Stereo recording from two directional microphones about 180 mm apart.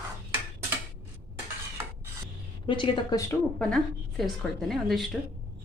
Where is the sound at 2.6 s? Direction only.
25° left (ahead or behind).